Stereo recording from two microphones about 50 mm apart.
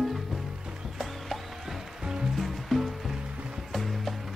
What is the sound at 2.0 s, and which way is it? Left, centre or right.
Music, centre.